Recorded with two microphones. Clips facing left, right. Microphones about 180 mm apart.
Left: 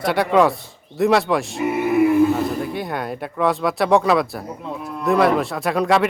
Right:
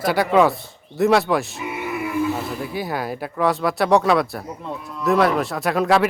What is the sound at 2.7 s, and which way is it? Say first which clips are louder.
Speech: even; centre (ahead or behind).